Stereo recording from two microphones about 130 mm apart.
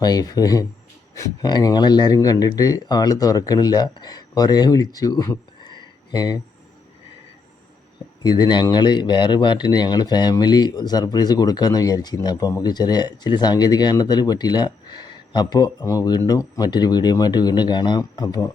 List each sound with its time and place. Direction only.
0.0 s speech: 30° left (ahead or behind)
8.2 s speech: 30° left (ahead or behind)